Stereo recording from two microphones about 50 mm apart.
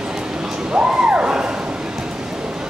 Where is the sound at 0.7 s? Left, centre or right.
Right.